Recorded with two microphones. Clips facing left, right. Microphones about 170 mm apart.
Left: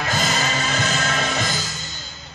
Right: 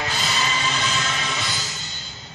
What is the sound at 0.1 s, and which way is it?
Music, 45° left (ahead or behind).